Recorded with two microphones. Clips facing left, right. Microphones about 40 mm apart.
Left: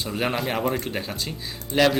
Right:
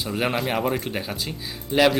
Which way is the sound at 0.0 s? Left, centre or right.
Centre.